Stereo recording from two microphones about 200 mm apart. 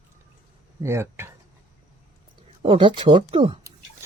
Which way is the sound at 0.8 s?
15° right (ahead or behind).